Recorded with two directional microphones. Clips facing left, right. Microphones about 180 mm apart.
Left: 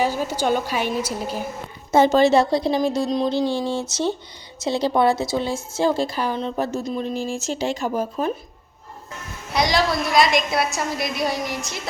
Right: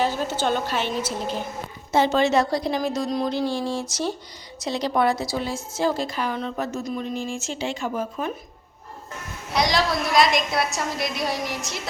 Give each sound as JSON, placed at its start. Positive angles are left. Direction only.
{"t": 0.0, "sound": "a woman's voice", "side_deg": 10}
{"t": 1.9, "sound": "speech", "side_deg": 45}
{"t": 9.5, "sound": "a woman's voice", "side_deg": 0}